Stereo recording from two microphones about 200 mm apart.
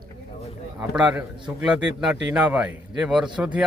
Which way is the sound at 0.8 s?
5° right (ahead or behind).